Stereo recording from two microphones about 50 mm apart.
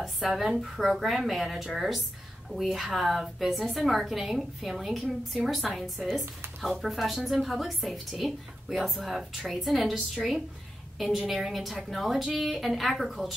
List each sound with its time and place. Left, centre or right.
0.2 s a woman's voice: centre